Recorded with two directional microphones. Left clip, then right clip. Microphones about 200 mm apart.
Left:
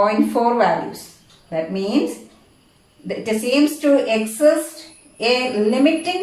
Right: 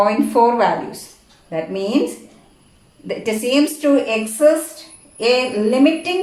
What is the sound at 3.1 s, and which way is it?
A woman's voice, 35° right (ahead or behind).